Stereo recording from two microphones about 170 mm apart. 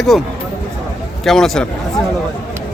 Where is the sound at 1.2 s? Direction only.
Centre (ahead or behind).